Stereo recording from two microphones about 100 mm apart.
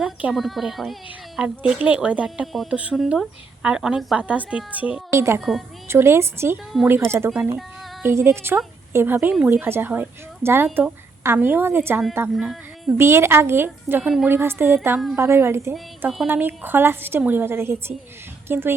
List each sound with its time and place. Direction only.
0.0 s a woman's voice: 10° right (ahead or behind)
0.3 s a woman's voice: centre (ahead or behind)
2.7 s a woman's voice: 15° right (ahead or behind)
5.1 s a woman's voice: 25° right (ahead or behind)
5.4 s speech: centre (ahead or behind)
5.9 s a woman's voice: 25° right (ahead or behind)
12.4 s speech: 5° right (ahead or behind)
13.0 s a woman's voice: 25° right (ahead or behind)